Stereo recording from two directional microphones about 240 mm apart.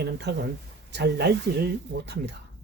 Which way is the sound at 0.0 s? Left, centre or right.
Right.